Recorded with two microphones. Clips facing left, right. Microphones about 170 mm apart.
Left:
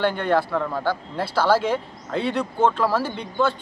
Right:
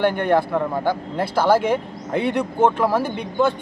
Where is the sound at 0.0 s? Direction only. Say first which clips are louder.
Right 3 dB; 15° right (ahead or behind).